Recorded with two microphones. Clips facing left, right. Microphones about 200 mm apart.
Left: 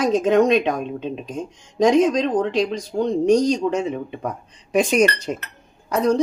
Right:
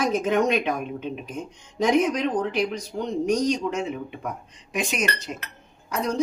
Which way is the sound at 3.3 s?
35° left (ahead or behind).